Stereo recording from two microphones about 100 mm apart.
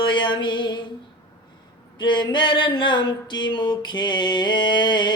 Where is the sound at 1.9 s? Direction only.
50° left (ahead or behind).